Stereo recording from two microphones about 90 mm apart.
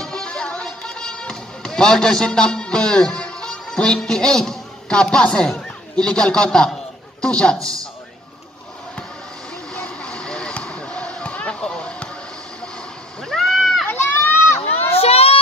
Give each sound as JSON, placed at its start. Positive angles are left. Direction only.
{"t": 0.0, "sound": "music", "side_deg": 10}
{"t": 7.5, "sound": "a man's voice", "side_deg": -40}
{"t": 9.8, "sound": "basketball bounce", "side_deg": 10}
{"t": 13.2, "sound": "a sound", "side_deg": 5}
{"t": 13.8, "sound": "children playing", "side_deg": 25}
{"t": 15.0, "sound": "crowd", "side_deg": 90}